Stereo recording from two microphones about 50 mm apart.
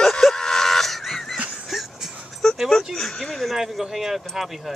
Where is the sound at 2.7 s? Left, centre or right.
Centre.